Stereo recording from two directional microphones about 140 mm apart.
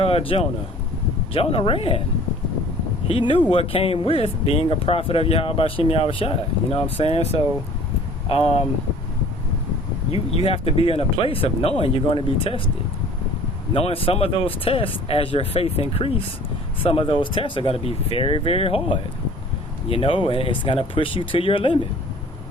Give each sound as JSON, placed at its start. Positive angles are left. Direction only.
{"t": 0.0, "sound": "speech", "side_deg": 40}
{"t": 3.1, "sound": "speech", "side_deg": 40}
{"t": 10.1, "sound": "speech", "side_deg": 40}
{"t": 13.7, "sound": "speech", "side_deg": 40}
{"t": 19.9, "sound": "speech", "side_deg": 40}